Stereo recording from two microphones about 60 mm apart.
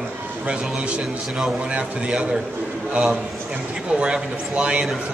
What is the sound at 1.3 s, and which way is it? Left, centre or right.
Speech, centre.